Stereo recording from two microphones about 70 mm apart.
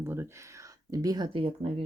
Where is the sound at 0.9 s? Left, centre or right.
Right.